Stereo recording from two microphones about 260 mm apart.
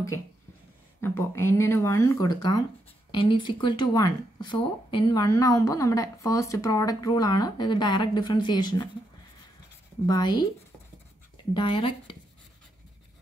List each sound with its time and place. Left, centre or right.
1.0 s speech: centre
10.0 s speech: centre
11.5 s speech: centre